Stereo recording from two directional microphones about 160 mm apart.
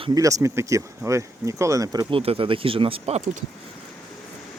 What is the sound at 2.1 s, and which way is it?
Speech, 35° right (ahead or behind).